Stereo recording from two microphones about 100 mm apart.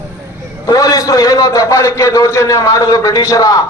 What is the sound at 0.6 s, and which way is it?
A man's voice, 35° left (ahead or behind).